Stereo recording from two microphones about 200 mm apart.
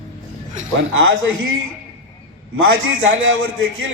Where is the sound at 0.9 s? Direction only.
70° right (ahead or behind).